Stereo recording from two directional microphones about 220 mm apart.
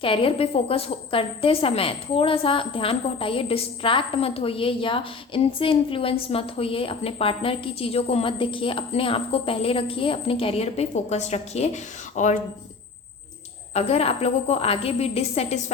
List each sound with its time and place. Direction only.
0.0 s a woman's voice: 25° left (ahead or behind)
13.7 s a woman's voice: 30° left (ahead or behind)